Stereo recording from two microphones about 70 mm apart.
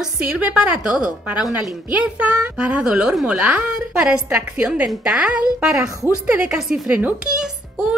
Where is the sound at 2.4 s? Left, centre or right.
Centre.